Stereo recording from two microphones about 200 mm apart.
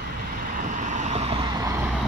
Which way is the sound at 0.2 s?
40° right (ahead or behind).